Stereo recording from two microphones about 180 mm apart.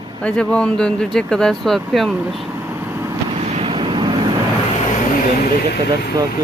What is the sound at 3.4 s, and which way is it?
Vehicle, 35° right (ahead or behind).